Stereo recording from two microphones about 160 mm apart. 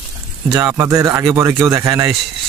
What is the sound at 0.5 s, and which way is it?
Speech, 15° right (ahead or behind).